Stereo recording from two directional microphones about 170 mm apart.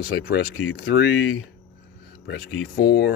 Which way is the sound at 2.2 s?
75° left (ahead or behind).